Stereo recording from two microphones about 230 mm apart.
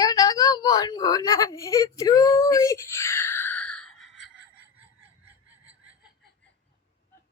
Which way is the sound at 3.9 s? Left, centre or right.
Left.